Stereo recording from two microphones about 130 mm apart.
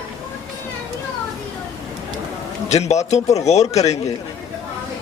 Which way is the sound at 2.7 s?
60° left (ahead or behind).